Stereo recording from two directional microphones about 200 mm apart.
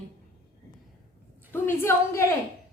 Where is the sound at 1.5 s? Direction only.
10° left (ahead or behind).